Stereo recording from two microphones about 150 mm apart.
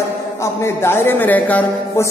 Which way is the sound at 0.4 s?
20° left (ahead or behind).